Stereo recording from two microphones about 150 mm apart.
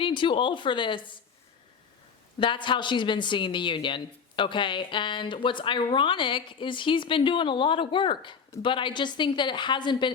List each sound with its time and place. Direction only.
0.0 s speech: 35° left (ahead or behind)
2.4 s speech: 35° left (ahead or behind)